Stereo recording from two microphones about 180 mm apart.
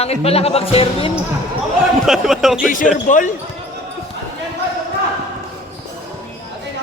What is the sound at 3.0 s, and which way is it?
Speech, 45° left (ahead or behind).